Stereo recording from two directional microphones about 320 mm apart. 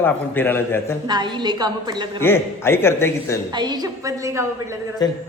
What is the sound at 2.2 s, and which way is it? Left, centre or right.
A man's voice, centre.